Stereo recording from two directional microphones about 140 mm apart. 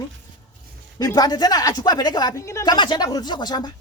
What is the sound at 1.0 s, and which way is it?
Speech, 25° left (ahead or behind).